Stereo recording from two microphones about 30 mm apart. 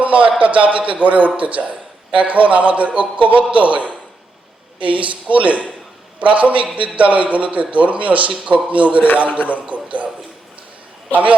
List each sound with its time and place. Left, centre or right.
0.0 s a man's voice: right
11.1 s a man's voice: right